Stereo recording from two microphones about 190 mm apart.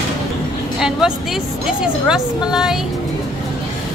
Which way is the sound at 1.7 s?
5° right (ahead or behind).